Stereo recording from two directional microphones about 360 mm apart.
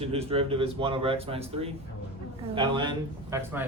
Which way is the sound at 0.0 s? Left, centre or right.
Centre.